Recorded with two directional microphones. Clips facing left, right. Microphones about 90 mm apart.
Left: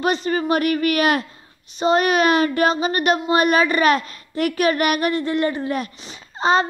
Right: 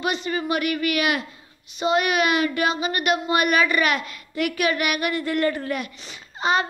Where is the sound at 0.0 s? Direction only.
40° left (ahead or behind); by 5.7 s 25° left (ahead or behind).